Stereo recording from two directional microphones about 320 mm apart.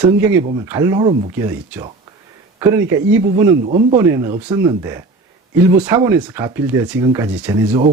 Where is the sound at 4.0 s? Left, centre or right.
Centre.